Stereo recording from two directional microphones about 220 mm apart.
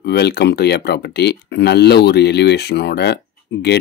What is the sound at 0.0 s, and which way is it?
Speech, 45° left (ahead or behind).